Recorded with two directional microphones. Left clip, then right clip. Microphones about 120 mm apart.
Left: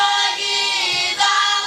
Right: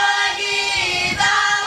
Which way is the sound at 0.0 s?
20° left (ahead or behind).